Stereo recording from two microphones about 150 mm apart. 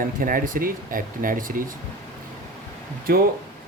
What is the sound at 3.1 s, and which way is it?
Speech, 80° right.